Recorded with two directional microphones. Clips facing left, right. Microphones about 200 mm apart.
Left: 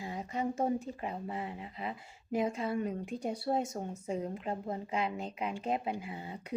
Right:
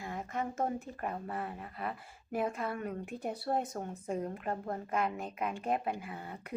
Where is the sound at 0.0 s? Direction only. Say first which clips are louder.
Left 2 dB; 10° left (ahead or behind).